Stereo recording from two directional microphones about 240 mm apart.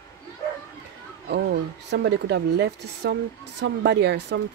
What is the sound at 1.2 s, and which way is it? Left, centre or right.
Speech, right.